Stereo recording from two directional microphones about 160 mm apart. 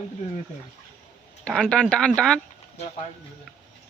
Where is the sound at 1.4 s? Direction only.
5° left (ahead or behind).